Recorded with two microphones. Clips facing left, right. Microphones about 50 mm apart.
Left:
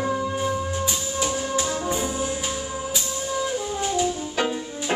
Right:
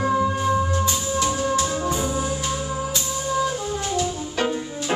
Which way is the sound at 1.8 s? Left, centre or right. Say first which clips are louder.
Right 2 dB; centre.